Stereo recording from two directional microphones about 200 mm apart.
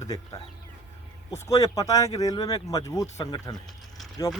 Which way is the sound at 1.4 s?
15° left (ahead or behind).